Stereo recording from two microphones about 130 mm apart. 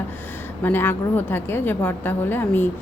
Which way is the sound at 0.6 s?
15° left (ahead or behind).